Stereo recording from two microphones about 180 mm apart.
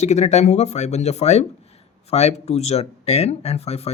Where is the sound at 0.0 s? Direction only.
40° left (ahead or behind).